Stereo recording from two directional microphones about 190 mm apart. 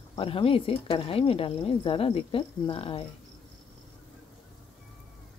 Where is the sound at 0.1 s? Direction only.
30° left (ahead or behind).